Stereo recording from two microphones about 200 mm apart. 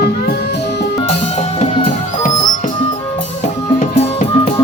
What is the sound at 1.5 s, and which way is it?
Music, 40° left (ahead or behind).